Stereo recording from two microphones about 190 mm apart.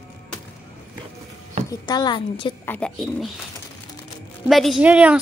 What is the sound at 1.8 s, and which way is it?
Speech, 20° left (ahead or behind).